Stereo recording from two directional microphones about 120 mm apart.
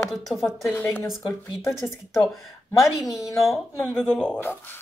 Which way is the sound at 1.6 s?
Centre (ahead or behind).